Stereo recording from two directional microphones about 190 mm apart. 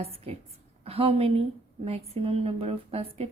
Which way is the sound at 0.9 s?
30° right (ahead or behind).